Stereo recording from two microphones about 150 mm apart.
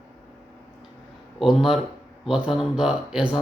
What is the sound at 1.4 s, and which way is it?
Speech, centre (ahead or behind).